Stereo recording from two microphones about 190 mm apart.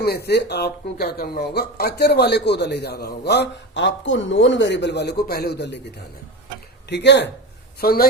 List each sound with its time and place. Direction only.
0.0 s speech: 55° left (ahead or behind)
6.9 s speech: 65° left (ahead or behind)
7.8 s a woman's voice: 55° left (ahead or behind)